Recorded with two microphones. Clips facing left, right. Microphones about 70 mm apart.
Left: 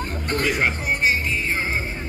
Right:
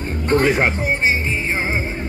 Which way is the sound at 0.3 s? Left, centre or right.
Right.